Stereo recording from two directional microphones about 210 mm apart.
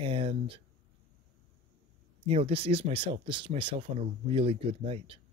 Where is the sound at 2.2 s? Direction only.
25° right (ahead or behind).